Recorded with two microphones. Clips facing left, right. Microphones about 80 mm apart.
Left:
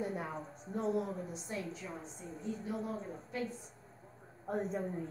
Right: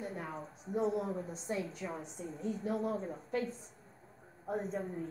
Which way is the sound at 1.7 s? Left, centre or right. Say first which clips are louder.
Right 2 dB; right.